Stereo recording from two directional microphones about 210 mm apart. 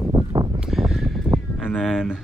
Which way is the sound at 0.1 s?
25° right (ahead or behind).